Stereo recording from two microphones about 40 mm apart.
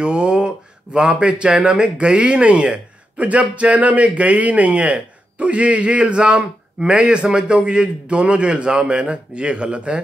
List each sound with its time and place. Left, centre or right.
0.0 s a man's voice: right